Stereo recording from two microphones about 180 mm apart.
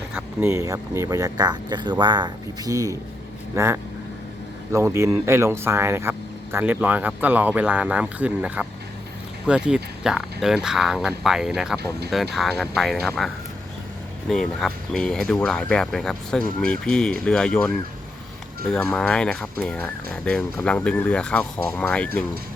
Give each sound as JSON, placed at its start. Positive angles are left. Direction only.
{"t": 0.1, "sound": "speech", "side_deg": -10}
{"t": 14.3, "sound": "speech", "side_deg": 0}